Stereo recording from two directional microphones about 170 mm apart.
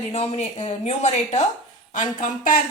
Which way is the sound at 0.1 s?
40° left (ahead or behind).